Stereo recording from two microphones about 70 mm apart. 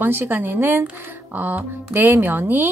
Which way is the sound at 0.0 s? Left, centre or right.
Right.